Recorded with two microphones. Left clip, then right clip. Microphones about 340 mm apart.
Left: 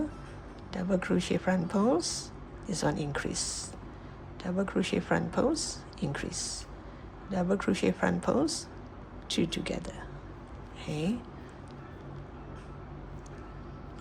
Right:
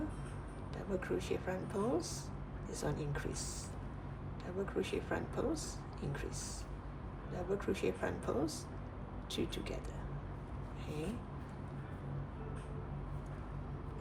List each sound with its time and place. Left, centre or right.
0.9 s speech: left
10.9 s speech: left